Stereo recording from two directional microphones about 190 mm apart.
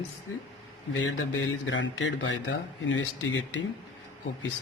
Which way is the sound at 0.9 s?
80° left.